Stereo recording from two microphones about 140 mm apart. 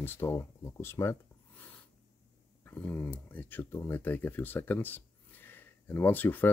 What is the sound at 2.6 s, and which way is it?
Speech, 15° left (ahead or behind).